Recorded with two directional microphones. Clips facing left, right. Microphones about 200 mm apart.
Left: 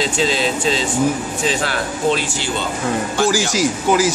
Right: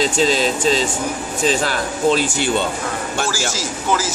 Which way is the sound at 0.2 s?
40° right (ahead or behind).